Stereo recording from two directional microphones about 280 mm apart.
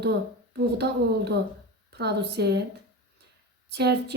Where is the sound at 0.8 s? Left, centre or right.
Right.